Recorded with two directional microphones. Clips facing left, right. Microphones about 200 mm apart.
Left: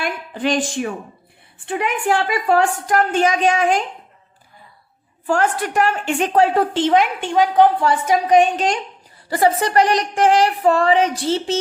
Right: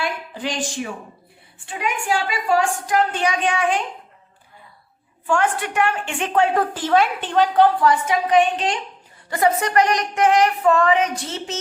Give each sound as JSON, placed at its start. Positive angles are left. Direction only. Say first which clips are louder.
{"t": 0.0, "sound": "a woman's voice", "louder": "left 4 dB", "side_deg": 55}
{"t": 5.2, "sound": "a woman's voice", "louder": "left 2 dB", "side_deg": 40}
{"t": 7.9, "sound": "a woman's voice", "louder": "left 2 dB", "side_deg": 40}
{"t": 9.3, "sound": "a woman's voice", "louder": "left 2 dB", "side_deg": 30}